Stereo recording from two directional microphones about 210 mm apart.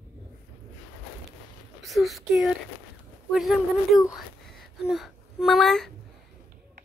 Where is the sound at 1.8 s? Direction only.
Centre (ahead or behind).